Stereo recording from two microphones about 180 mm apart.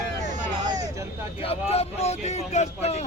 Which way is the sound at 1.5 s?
35° left (ahead or behind).